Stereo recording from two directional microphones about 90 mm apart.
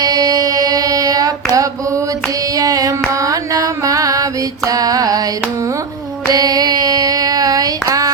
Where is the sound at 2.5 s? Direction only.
40° right (ahead or behind).